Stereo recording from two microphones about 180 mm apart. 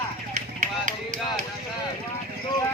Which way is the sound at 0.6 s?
40° right (ahead or behind).